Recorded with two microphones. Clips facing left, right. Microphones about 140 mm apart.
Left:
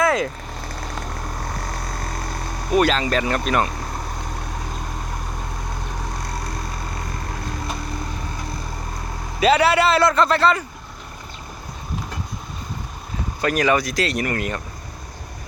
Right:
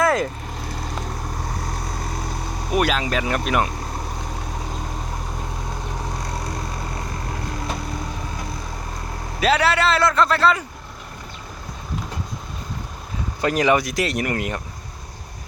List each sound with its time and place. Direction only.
0.0 s vehicle: centre (ahead or behind)
2.7 s speech: 10° right (ahead or behind)
9.4 s a man's voice: centre (ahead or behind)
13.4 s speech: 20° right (ahead or behind)